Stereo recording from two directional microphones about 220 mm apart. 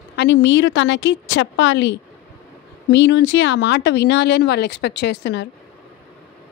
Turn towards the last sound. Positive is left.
turn(degrees=50)  # may be behind; listen again after turning